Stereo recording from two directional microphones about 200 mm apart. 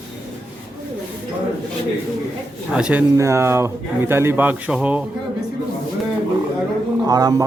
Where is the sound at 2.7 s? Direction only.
5° right (ahead or behind).